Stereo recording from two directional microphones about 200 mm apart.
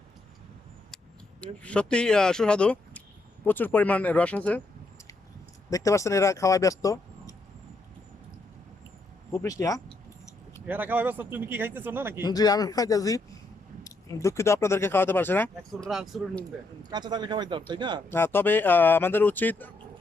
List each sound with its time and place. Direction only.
1.4 s speech: 5° left (ahead or behind)
5.7 s speech: 15° left (ahead or behind)
9.3 s speech: 15° left (ahead or behind)
10.7 s speech: 10° right (ahead or behind)
12.2 s speech: 20° left (ahead or behind)
15.9 s speech: centre (ahead or behind)
16.9 s speech: 20° right (ahead or behind)
18.1 s speech: 10° left (ahead or behind)